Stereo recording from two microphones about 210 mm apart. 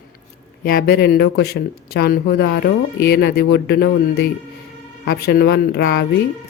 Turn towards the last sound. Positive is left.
turn(degrees=50)  # may be behind; listen again after turning